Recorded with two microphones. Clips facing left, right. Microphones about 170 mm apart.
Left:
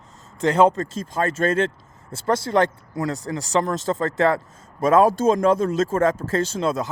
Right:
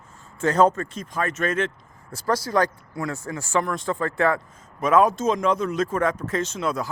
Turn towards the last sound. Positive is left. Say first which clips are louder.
# left 3 dB
turn(degrees=25)  # may be behind; listen again after turning